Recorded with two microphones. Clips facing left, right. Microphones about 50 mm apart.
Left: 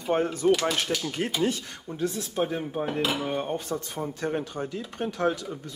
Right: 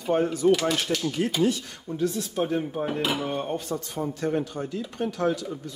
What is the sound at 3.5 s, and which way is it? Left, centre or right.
Speech, left.